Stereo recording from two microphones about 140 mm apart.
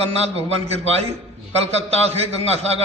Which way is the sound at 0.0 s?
45° right (ahead or behind).